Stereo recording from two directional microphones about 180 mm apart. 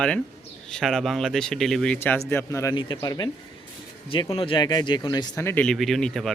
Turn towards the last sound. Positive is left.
turn(degrees=0)  # may be behind; listen again after turning